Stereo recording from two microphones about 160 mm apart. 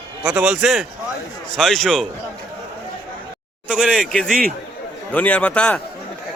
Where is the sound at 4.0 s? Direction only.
5° left (ahead or behind).